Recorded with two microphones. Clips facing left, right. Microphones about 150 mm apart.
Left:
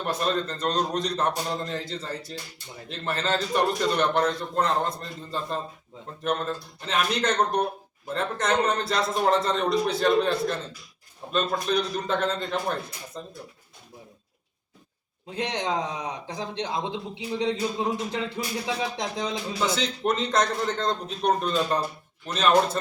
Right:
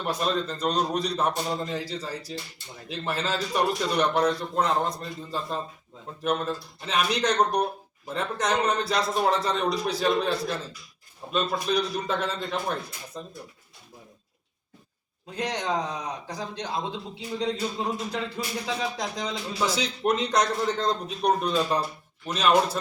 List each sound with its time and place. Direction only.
0.0 s a man's voice: centre (ahead or behind)
15.4 s a man's voice: 20° left (ahead or behind)
19.7 s a man's voice: centre (ahead or behind)